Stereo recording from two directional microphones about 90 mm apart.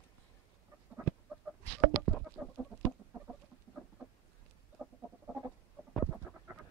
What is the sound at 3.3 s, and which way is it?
Chicken, 10° right (ahead or behind).